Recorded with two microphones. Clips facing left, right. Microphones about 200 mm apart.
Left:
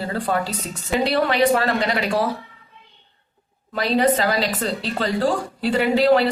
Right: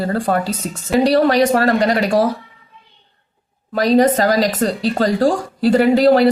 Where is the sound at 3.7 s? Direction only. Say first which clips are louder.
Right 6 dB; 45° right (ahead or behind).